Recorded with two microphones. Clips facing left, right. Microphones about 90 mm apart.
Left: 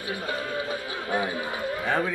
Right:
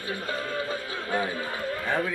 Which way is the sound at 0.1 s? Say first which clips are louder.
Left 1 dB; 15° left (ahead or behind).